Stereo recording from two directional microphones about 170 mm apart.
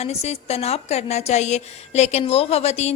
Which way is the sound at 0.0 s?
40° left (ahead or behind).